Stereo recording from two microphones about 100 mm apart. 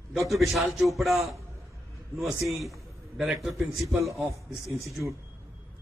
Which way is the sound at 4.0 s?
30° right (ahead or behind).